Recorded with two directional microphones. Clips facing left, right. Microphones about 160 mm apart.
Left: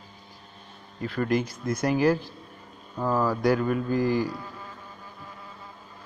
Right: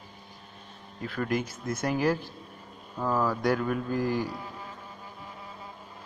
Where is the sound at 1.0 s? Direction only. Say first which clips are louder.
Left 4 dB; centre (ahead or behind).